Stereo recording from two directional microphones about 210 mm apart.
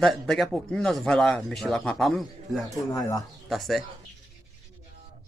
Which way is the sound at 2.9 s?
15° left (ahead or behind).